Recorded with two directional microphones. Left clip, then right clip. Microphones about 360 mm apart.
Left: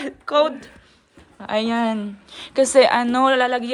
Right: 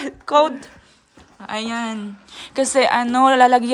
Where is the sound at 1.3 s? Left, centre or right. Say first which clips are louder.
Left 4 dB; centre.